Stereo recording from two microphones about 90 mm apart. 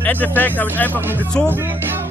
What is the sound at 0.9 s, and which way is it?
Speech, 25° right (ahead or behind).